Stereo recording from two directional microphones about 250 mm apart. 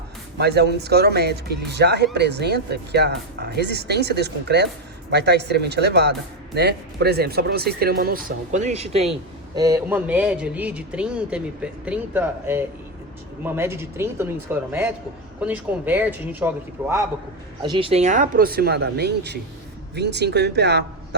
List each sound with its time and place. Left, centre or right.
0.3 s speech: right
9.6 s a man's voice: centre
17.6 s speech: centre; by 21.2 s right